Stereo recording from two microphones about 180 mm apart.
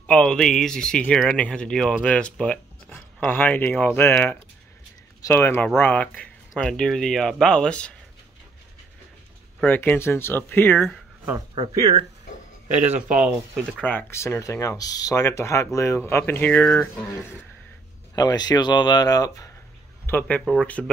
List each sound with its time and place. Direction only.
0.0 s speech: 5° left (ahead or behind)
9.7 s speech: 10° left (ahead or behind)
11.3 s speech: 25° right (ahead or behind)
12.8 s speech: 40° right (ahead or behind)
13.7 s speech: 10° left (ahead or behind)
18.1 s speech: 20° left (ahead or behind); by 20.9 s 5° left (ahead or behind)